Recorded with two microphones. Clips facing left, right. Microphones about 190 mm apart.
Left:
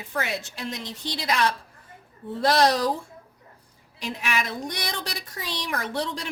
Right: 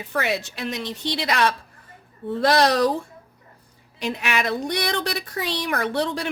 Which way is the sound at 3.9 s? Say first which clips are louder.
Right 4 dB; 65° right (ahead or behind).